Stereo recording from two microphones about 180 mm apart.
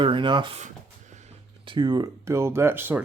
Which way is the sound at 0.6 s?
40° right (ahead or behind).